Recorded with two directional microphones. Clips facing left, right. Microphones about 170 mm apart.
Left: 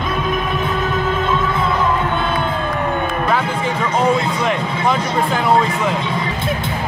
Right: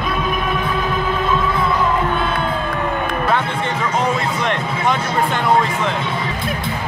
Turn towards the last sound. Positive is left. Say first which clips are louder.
# left 1 dB
turn(degrees=5)  # may be behind; listen again after turning